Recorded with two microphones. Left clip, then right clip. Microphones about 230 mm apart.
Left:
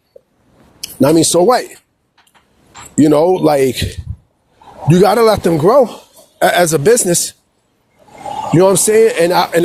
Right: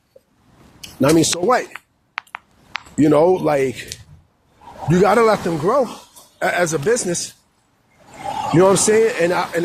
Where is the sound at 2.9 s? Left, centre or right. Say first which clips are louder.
Left 4 dB; left.